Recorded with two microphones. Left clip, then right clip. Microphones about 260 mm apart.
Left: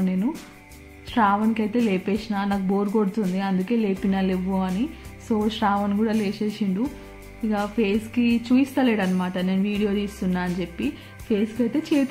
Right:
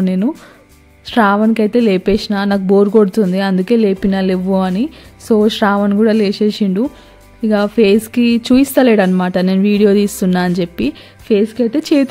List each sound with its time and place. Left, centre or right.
0.0 s a woman's voice: right